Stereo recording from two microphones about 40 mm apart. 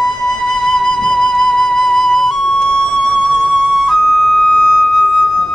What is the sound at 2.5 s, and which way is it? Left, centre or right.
Music, centre.